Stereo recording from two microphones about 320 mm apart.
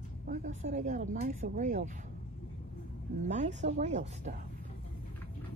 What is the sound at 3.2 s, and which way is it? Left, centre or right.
Speech, right.